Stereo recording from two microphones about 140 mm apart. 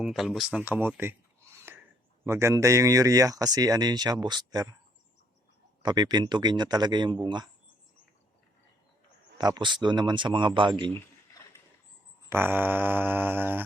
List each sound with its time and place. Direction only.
0.0 s speech: centre (ahead or behind)
0.6 s mantra: 15° right (ahead or behind)
1.5 s a sound: 15° right (ahead or behind)
2.2 s speech: 20° right (ahead or behind)
5.8 s speech: 30° right (ahead or behind)
9.4 s speech: 30° right (ahead or behind)
12.3 s mantra: 15° right (ahead or behind)